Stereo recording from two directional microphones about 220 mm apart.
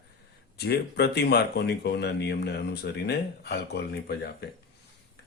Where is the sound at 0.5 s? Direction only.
45° left (ahead or behind).